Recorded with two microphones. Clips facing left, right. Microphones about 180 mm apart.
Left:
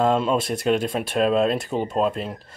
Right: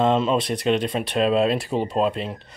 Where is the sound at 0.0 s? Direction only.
Centre (ahead or behind).